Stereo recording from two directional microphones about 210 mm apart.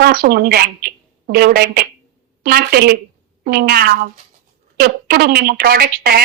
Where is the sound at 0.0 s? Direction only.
45° right (ahead or behind).